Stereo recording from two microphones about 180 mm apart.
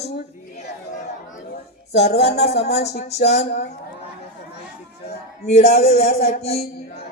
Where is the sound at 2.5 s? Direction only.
35° left (ahead or behind).